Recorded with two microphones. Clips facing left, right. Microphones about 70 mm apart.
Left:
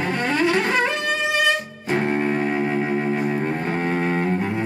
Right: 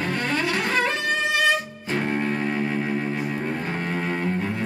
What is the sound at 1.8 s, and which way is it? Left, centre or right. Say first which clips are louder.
Music: left 4 dB; left.